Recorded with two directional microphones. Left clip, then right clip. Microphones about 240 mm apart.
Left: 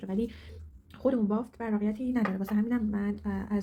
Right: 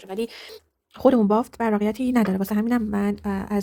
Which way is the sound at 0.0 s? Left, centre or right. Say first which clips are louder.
Right 5 dB; right.